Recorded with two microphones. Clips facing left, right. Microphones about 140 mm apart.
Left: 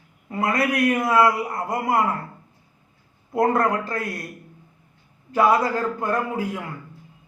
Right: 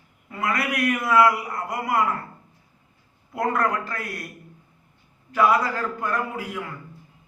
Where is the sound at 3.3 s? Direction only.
25° left (ahead or behind).